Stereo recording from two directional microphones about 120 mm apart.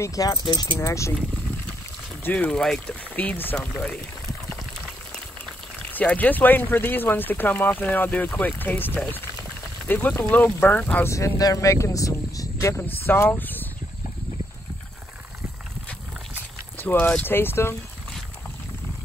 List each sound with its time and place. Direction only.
0.0 s speech: 30° left (ahead or behind)
0.7 s speech: 25° left (ahead or behind)
2.2 s speech: 15° left (ahead or behind)
5.8 s speech: 15° left (ahead or behind)
11.1 s speech: 25° left (ahead or behind)
16.7 s speech: 15° left (ahead or behind)